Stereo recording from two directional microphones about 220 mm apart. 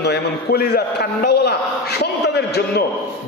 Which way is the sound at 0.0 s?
50° left (ahead or behind).